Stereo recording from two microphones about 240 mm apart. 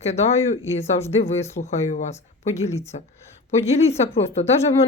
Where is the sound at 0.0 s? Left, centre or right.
Left.